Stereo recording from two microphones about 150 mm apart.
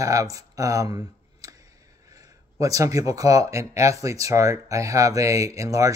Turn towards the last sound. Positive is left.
turn(degrees=-20)  # may be behind; listen again after turning